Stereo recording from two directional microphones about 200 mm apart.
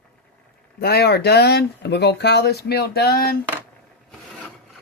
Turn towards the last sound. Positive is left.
turn(degrees=50)  # may be behind; listen again after turning